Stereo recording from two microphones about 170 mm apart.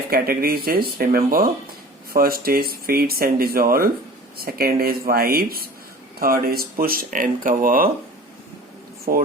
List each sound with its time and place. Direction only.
0.1 s speech: 60° right (ahead or behind)
9.1 s speech: 55° right (ahead or behind)